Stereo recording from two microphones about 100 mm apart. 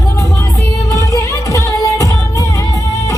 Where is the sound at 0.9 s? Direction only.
35° left (ahead or behind).